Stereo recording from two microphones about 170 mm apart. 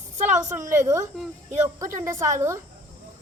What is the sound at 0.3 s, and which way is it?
A woman's voice, 15° right (ahead or behind).